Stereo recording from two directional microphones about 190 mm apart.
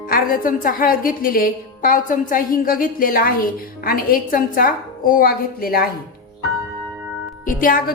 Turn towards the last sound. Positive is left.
turn(degrees=45)  # may be behind; listen again after turning